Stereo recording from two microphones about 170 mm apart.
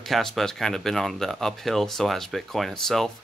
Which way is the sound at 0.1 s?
Centre (ahead or behind).